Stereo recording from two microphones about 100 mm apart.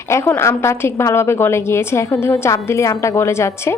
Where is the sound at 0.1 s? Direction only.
25° left (ahead or behind).